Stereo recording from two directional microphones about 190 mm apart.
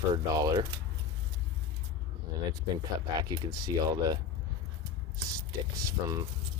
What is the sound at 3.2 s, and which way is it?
Speech, 20° right (ahead or behind).